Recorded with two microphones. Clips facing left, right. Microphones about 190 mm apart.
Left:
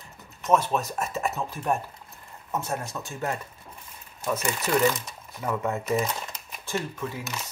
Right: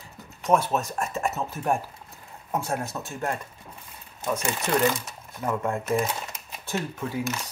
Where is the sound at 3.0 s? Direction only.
10° right (ahead or behind).